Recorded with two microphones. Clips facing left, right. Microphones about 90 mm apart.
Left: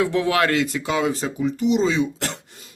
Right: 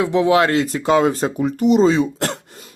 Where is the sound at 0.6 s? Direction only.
40° right (ahead or behind).